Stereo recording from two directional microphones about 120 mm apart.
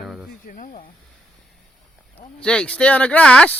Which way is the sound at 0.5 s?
90° left.